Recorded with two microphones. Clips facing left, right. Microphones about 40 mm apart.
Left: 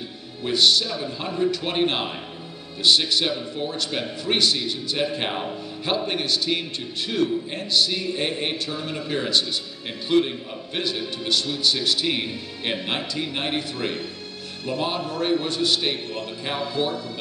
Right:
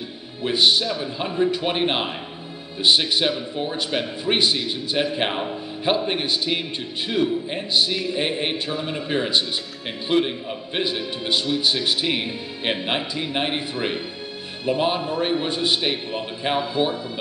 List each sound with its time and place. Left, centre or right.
0.4 s a man's voice: right